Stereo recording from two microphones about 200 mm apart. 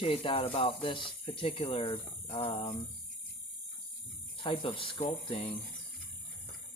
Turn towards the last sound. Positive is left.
turn(degrees=30)  # may be behind; listen again after turning